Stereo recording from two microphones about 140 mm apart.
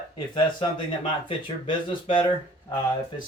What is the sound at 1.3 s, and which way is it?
Speech, 40° left (ahead or behind).